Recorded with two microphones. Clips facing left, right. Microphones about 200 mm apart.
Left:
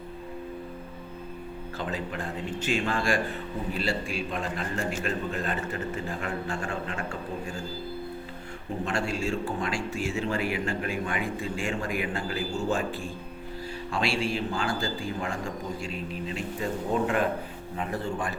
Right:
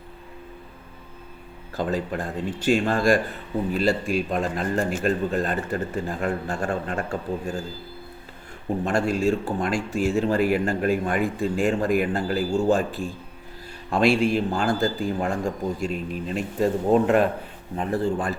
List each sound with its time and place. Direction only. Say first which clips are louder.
1.7 s speech: right 8 dB; 40° right (ahead or behind)
8.8 s speech: right 7 dB; 40° right (ahead or behind)
13.9 s speech: right 9 dB; 50° right (ahead or behind)
17.7 s speech: right 7 dB; 35° right (ahead or behind)